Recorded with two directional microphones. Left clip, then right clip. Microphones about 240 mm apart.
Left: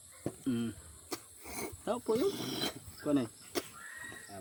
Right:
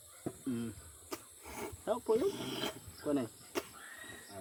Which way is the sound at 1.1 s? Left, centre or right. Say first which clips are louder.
Left 2 dB; left.